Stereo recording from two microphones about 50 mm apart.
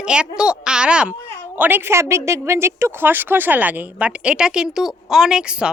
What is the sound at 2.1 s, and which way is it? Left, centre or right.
Speech, right.